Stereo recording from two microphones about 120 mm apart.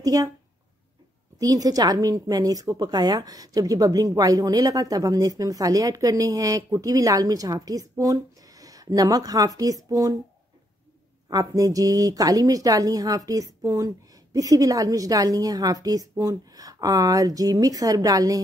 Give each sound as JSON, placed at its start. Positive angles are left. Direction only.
{"t": 0.0, "sound": "speech", "side_deg": -30}
{"t": 1.4, "sound": "a woman's voice", "side_deg": -30}
{"t": 11.2, "sound": "a woman's voice", "side_deg": -30}